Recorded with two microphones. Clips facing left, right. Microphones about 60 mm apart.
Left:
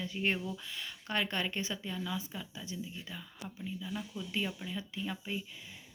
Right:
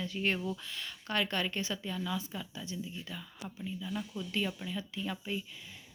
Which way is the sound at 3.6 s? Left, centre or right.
Centre.